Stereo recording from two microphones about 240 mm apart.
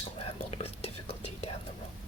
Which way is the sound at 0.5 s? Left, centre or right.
Left.